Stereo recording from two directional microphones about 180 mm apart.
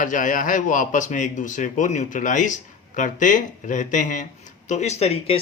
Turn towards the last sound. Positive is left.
turn(degrees=35)  # may be behind; listen again after turning